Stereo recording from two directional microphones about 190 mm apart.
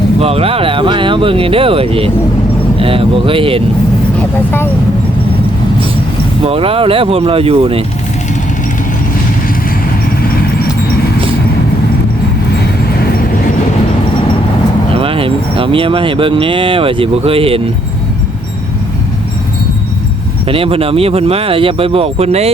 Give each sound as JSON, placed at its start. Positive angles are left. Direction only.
{"t": 0.2, "sound": "speech", "side_deg": -30}
{"t": 6.4, "sound": "speech", "side_deg": -30}
{"t": 14.9, "sound": "speech", "side_deg": -30}
{"t": 20.5, "sound": "speech", "side_deg": -30}